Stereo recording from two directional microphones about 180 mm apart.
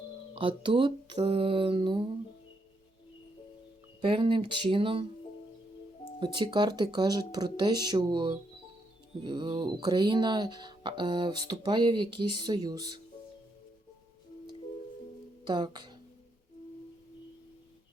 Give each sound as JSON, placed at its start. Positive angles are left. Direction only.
{"t": 0.3, "sound": "speech", "side_deg": -30}
{"t": 4.0, "sound": "speech", "side_deg": -30}
{"t": 6.1, "sound": "speech", "side_deg": -25}
{"t": 15.4, "sound": "speech", "side_deg": -25}